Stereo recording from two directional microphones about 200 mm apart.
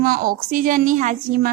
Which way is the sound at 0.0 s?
45° right (ahead or behind).